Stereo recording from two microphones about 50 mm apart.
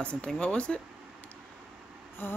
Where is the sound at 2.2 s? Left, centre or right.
Left.